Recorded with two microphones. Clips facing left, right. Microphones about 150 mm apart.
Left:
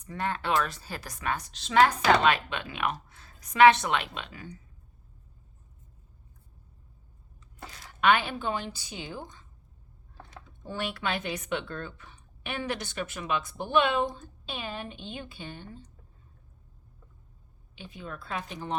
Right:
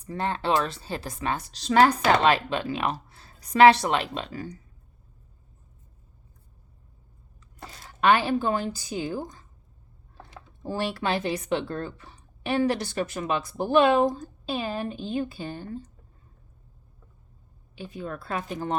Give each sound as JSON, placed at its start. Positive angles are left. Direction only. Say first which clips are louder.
{"t": 0.0, "sound": "speech", "louder": "right 4 dB", "side_deg": -30}
{"t": 7.9, "sound": "speech", "louder": "right 3 dB", "side_deg": -35}
{"t": 17.7, "sound": "speech", "louder": "right 6 dB", "side_deg": -45}